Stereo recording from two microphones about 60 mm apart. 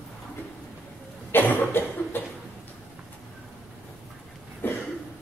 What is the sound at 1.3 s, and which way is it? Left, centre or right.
Cough, left.